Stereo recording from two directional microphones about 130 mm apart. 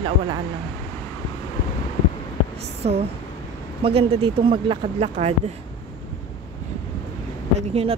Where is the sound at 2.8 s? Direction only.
45° right (ahead or behind).